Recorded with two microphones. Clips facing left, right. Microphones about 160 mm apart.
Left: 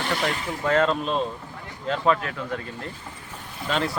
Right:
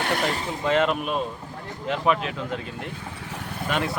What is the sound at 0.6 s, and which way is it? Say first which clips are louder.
Speech: left 1 dB; 15° right (ahead or behind).